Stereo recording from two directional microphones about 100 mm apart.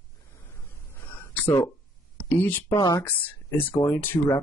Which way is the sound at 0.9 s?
25° left (ahead or behind).